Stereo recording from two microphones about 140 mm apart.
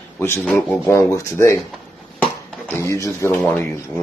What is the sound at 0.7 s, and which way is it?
Speech, 15° left (ahead or behind).